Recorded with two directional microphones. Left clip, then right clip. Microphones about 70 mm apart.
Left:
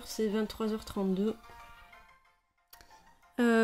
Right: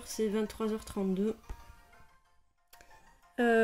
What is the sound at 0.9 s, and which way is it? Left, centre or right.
Speech, left.